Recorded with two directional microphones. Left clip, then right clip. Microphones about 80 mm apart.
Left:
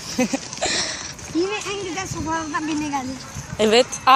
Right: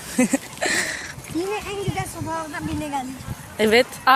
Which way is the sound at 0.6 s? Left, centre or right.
Right.